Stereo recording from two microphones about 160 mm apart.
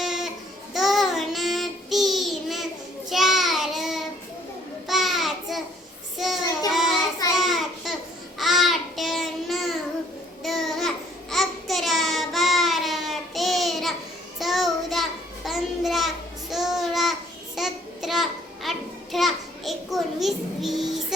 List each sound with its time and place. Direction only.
0.0 s a sound: centre (ahead or behind)
0.7 s child singing: centre (ahead or behind)
7.3 s a sound: centre (ahead or behind)
8.4 s child singing: centre (ahead or behind)
10.4 s babbling: centre (ahead or behind)
14.3 s child singing: centre (ahead or behind)